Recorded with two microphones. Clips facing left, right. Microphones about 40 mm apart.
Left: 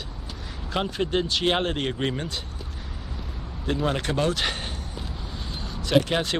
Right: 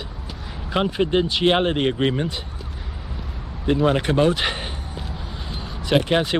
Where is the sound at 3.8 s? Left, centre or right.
Centre.